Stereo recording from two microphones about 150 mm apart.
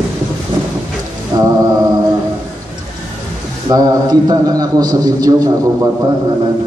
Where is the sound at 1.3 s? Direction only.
25° right (ahead or behind).